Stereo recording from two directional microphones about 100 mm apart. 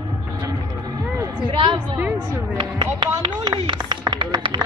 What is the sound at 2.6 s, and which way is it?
Speech, 50° right (ahead or behind).